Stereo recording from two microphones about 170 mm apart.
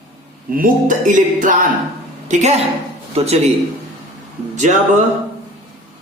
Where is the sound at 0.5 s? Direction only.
50° right (ahead or behind).